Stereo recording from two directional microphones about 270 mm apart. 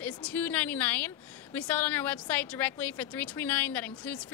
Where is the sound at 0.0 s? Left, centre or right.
Centre.